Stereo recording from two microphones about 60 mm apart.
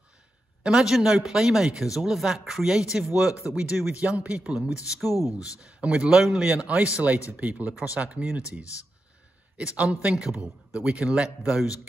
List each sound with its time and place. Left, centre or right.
0.7 s speech: centre
6.1 s a man's voice: centre
9.8 s a man's voice: centre